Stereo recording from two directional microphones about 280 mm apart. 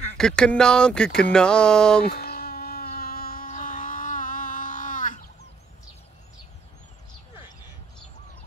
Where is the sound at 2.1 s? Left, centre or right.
Left.